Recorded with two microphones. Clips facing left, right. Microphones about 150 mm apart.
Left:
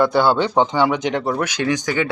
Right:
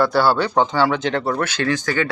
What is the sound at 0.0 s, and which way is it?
Speech, 20° left (ahead or behind).